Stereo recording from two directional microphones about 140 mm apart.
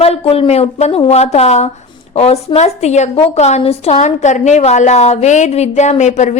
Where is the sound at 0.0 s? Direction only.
45° left (ahead or behind).